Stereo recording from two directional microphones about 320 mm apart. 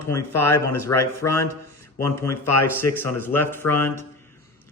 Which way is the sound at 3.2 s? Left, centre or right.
Centre.